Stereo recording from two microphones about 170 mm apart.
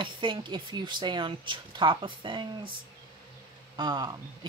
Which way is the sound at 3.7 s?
25° right (ahead or behind).